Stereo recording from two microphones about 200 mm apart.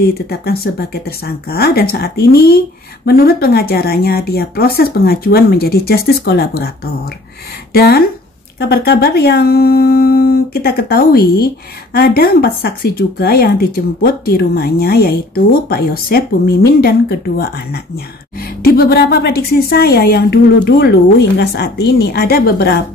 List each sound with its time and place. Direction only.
0.0 s speech: 50° left (ahead or behind)
18.6 s speech: 50° left (ahead or behind)